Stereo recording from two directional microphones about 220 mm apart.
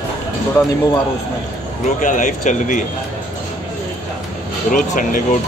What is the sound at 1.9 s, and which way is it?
Speech, 35° left (ahead or behind).